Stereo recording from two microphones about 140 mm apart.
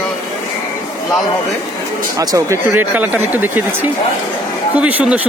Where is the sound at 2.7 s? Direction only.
15° right (ahead or behind).